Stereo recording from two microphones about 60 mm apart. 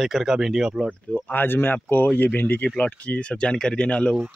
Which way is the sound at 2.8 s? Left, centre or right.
Centre.